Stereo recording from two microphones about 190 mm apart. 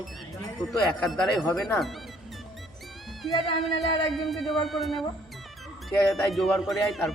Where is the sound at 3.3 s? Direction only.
25° left (ahead or behind).